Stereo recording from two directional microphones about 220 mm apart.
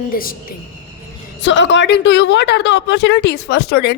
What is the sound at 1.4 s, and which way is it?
A woman's voice, 55° left (ahead or behind).